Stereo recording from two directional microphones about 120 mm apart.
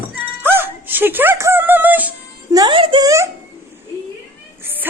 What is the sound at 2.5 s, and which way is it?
Speech, 30° right (ahead or behind).